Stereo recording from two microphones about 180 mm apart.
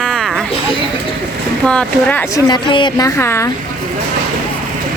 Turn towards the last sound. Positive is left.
turn(degrees=15)  # may be behind; listen again after turning